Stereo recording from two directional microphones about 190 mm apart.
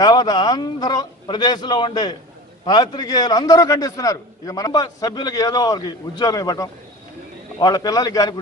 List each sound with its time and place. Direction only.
0.0 s a man's voice: 20° left (ahead or behind)